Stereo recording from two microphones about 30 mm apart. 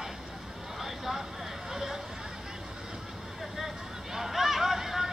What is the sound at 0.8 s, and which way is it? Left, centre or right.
Vehicle, centre.